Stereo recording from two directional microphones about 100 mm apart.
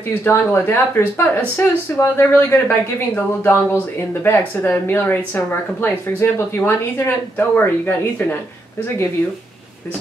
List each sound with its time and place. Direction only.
0.2 s speech: 20° left (ahead or behind)